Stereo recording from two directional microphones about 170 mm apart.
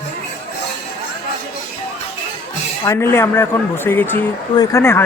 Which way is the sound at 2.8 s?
15° left (ahead or behind).